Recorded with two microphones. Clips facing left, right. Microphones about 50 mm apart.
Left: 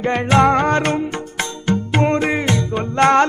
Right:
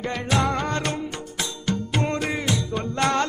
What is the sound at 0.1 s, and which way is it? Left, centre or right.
Music, left.